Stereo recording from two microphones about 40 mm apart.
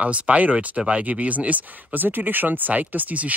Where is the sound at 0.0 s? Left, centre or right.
Right.